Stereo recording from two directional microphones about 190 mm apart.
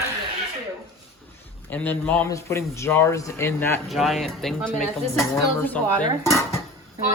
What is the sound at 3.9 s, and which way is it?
A man's voice, centre (ahead or behind).